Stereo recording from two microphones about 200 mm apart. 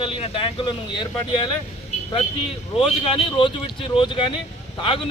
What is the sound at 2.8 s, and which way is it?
Speech, 25° left (ahead or behind).